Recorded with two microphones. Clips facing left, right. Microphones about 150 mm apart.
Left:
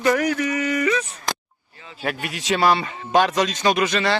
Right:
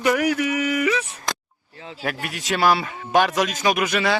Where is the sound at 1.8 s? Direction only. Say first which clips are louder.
Right 6 dB; 80° right.